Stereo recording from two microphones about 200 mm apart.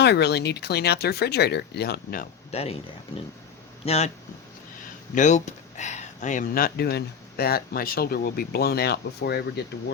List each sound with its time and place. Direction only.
0.0 s speech: 55° left (ahead or behind)
2.5 s speech: 30° left (ahead or behind)
3.8 s speech: 35° left (ahead or behind)
5.1 s speech: 35° left (ahead or behind); by 9.4 s 55° left (ahead or behind)